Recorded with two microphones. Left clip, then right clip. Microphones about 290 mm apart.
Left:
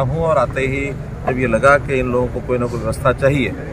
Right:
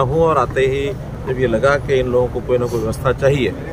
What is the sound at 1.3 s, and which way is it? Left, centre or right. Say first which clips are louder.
Speech: left 2 dB; centre.